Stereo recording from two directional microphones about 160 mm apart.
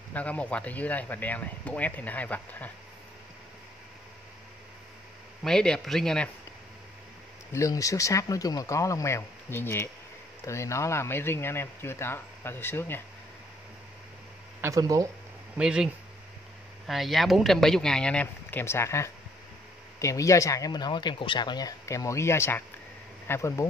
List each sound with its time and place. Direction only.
0.1 s speech: 10° left (ahead or behind)
5.4 s speech: 5° left (ahead or behind)
7.5 s speech: 20° left (ahead or behind)
14.6 s speech: 20° right (ahead or behind)
15.5 s speech: 5° right (ahead or behind); by 23.7 s 15° left (ahead or behind)